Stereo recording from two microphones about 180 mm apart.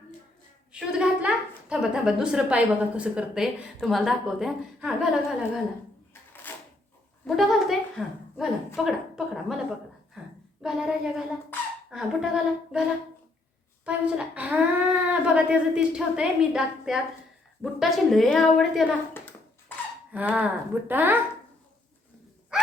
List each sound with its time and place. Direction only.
0.7 s a woman's voice: 5° right (ahead or behind)
6.5 s drawer open or close: 10° left (ahead or behind)
7.3 s a woman's voice: centre (ahead or behind)
10.2 s a sound: 5° right (ahead or behind)
10.6 s a woman's voice: 5° right (ahead or behind)
13.8 s a woman's voice: 5° right (ahead or behind)
19.1 s a sound: 10° left (ahead or behind)
20.3 s speech: 10° right (ahead or behind)